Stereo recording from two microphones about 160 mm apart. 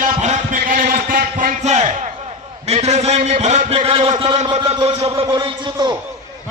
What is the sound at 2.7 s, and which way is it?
A man's voice, 45° right (ahead or behind).